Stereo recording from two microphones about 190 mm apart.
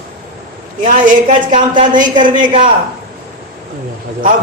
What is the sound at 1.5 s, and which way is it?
A woman's voice, 30° right (ahead or behind).